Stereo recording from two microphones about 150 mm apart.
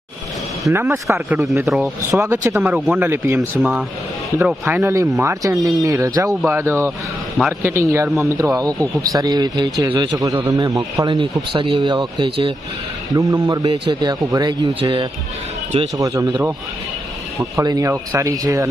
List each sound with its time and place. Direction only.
0.7 s speech: 15° right (ahead or behind)
1.6 s speech: centre (ahead or behind)
2.0 s speech: 15° right (ahead or behind)
2.6 s speech: 5° right (ahead or behind); by 12.5 s 35° right (ahead or behind)
13.1 s speech: 20° right (ahead or behind)
16.0 s speech: 20° right (ahead or behind)
17.6 s speech: 25° right (ahead or behind)